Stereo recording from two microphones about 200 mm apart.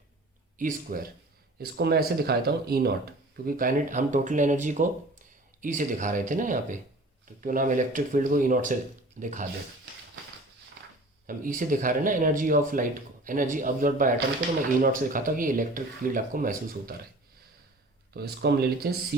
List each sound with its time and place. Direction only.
0.6 s speech: 45° right (ahead or behind)
11.3 s speech: 40° right (ahead or behind)
18.1 s speech: 50° right (ahead or behind)